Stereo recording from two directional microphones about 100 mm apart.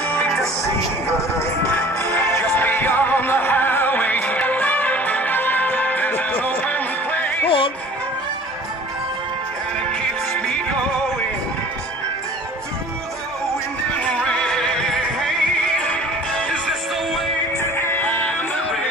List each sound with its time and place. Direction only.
1.7 s music: 15° left (ahead or behind)
7.4 s music: 60° left (ahead or behind)
9.8 s music: 10° left (ahead or behind)
13.8 s music: 10° left (ahead or behind)
17.6 s music: 25° left (ahead or behind)